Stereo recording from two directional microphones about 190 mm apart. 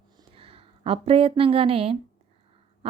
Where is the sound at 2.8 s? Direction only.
30° right (ahead or behind).